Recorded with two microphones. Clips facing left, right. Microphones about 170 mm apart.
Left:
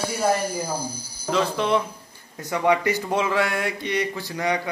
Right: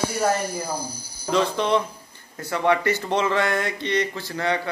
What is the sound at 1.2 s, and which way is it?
Speech, 5° left (ahead or behind).